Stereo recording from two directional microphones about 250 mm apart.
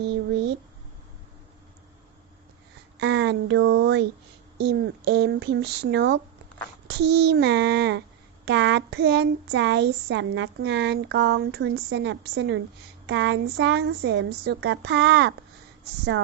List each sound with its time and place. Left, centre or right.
3.0 s speech: right